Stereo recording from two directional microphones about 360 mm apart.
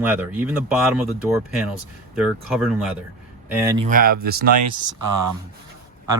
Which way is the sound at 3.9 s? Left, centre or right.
Right.